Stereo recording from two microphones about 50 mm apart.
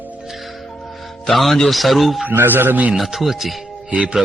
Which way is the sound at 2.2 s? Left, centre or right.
Right.